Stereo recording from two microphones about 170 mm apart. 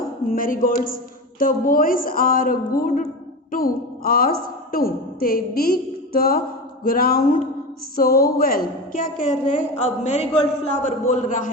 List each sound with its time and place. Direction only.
0.3 s a woman's voice: 55° left (ahead or behind)
9.7 s a man's voice: 45° left (ahead or behind)